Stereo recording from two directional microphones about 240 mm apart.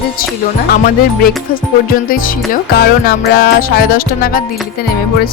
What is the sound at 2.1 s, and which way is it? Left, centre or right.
Music, left.